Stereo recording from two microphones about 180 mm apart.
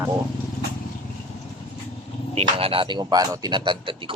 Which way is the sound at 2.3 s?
35° right (ahead or behind).